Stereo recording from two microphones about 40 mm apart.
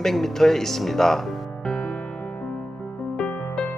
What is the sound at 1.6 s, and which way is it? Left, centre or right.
Music, left.